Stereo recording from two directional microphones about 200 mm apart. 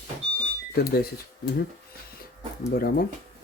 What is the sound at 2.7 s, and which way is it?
Speech, 50° left (ahead or behind).